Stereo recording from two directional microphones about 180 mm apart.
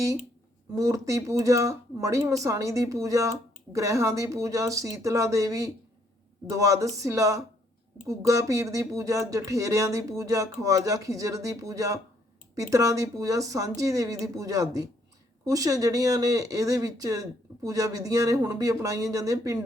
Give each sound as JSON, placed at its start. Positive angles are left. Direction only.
{"t": 0.8, "sound": "speech", "side_deg": -15}